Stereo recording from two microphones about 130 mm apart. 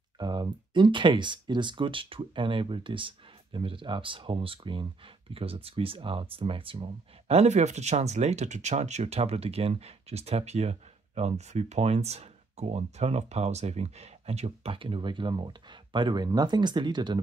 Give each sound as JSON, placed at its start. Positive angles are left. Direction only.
{"t": 0.2, "sound": "speech", "side_deg": -35}